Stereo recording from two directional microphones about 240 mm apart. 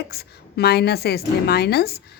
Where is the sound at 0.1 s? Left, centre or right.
Left.